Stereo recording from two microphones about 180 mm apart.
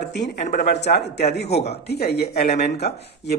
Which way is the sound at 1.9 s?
65° left (ahead or behind).